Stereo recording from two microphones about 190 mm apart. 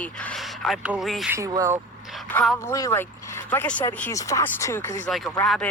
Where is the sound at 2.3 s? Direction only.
10° left (ahead or behind).